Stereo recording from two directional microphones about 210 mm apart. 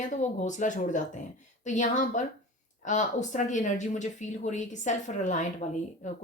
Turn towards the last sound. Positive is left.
turn(degrees=35)  # may be behind; listen again after turning